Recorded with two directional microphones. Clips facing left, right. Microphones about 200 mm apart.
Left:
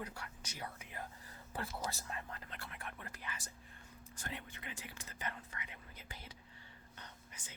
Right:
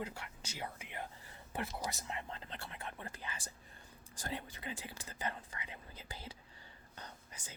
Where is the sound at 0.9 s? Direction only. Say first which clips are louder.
Right 2 dB; 25° right (ahead or behind).